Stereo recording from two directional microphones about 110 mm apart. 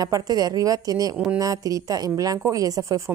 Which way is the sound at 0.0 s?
35° right (ahead or behind).